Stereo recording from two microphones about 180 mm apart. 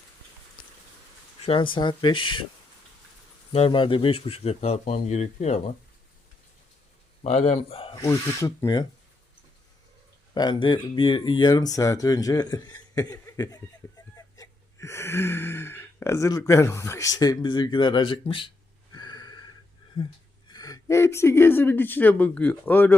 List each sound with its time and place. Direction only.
1.7 s speech: 25° left (ahead or behind)
3.5 s speech: 30° left (ahead or behind)
7.3 s speech: 40° left (ahead or behind)
7.9 s speech: 15° left (ahead or behind)
10.3 s speech: 25° left (ahead or behind)
14.2 s sigh: 20° left (ahead or behind)
20.5 s speech: 20° left (ahead or behind)